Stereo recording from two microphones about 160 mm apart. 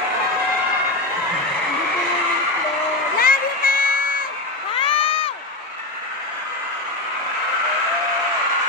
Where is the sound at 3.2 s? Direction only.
65° left (ahead or behind).